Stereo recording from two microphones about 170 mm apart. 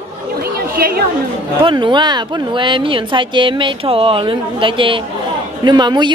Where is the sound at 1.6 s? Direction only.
25° right (ahead or behind).